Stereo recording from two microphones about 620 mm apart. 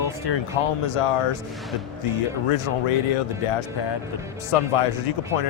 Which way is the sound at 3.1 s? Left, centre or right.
Left.